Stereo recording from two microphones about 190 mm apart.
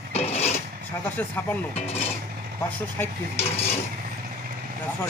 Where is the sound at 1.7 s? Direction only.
35° left (ahead or behind).